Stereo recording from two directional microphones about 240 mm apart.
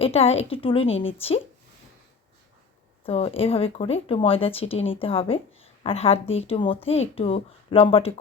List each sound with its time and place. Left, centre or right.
0.0 s speech: left
3.0 s speech: left